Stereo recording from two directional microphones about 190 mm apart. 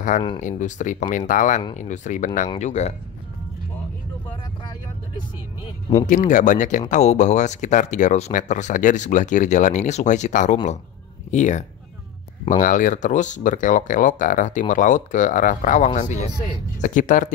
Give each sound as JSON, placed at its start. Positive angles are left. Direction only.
{"t": 0.4, "sound": "speech", "side_deg": 40}
{"t": 6.0, "sound": "speech", "side_deg": 40}